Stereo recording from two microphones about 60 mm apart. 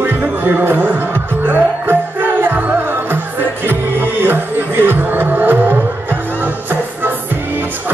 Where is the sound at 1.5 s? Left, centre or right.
Right.